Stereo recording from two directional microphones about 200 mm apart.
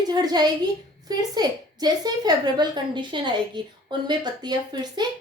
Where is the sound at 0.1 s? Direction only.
20° right (ahead or behind).